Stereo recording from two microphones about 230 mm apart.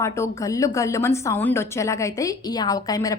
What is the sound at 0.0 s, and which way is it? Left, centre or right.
A woman's voice, centre.